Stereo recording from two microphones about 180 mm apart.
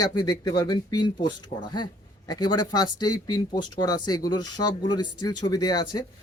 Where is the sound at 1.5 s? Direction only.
45° left (ahead or behind).